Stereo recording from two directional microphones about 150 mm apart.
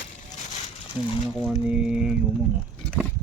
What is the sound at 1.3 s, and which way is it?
Speech, centre (ahead or behind).